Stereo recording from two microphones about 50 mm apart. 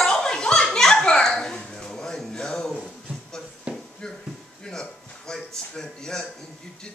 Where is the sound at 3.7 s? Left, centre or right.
Right.